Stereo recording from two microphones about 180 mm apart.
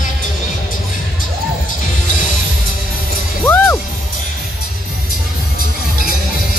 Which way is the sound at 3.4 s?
10° left (ahead or behind).